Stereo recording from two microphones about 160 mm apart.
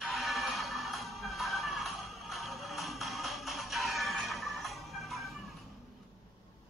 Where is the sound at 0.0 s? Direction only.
Centre (ahead or behind).